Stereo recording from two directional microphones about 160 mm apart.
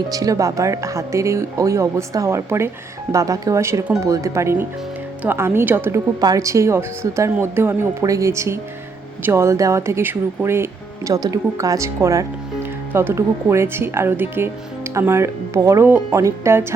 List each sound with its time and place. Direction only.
0.1 s speech: 20° right (ahead or behind)